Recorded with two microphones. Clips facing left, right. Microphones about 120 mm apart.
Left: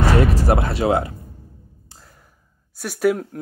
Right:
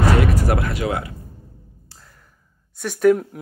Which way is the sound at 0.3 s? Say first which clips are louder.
Left 2 dB; 30° left (ahead or behind).